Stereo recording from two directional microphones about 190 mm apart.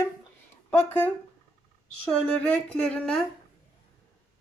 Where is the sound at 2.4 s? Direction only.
5° left (ahead or behind).